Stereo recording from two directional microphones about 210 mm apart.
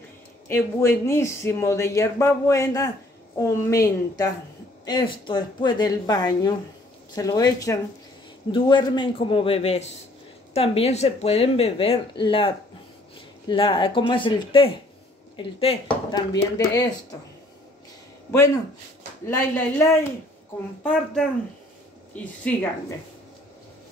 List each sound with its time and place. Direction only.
0.5 s speech: 10° left (ahead or behind)
18.3 s speech: 15° left (ahead or behind)